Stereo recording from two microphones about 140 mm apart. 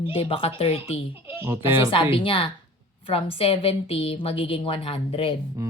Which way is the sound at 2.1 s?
40° left (ahead or behind).